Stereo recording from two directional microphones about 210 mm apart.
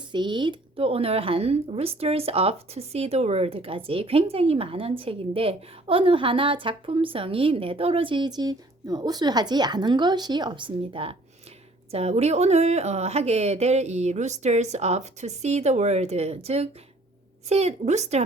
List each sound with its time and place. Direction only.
0.1 s speech: 20° right (ahead or behind)